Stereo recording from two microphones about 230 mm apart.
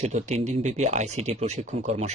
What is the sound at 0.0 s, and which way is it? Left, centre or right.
Speech, right.